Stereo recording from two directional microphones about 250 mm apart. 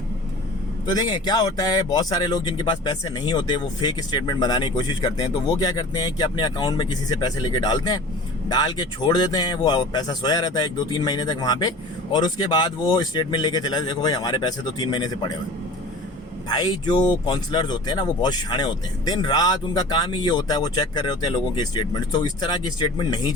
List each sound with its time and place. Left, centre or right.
0.9 s speech: centre
16.5 s speech: centre